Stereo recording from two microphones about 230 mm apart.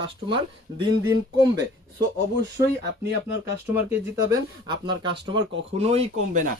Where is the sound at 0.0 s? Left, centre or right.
Right.